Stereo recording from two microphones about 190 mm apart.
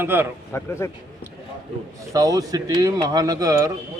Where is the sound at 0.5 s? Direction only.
15° left (ahead or behind).